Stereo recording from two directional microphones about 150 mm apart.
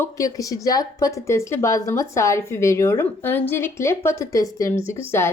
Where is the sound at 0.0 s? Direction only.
20° left (ahead or behind).